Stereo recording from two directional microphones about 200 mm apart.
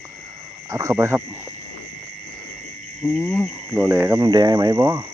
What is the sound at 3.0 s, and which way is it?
Cricket, 5° left (ahead or behind).